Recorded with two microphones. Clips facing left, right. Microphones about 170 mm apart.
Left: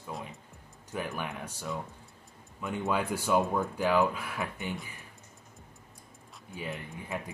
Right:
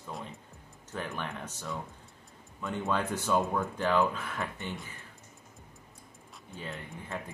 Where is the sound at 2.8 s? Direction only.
10° left (ahead or behind).